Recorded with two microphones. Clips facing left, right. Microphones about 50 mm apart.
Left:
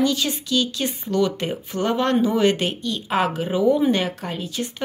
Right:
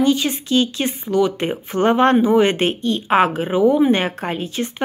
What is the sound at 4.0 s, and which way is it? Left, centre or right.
Speech, right.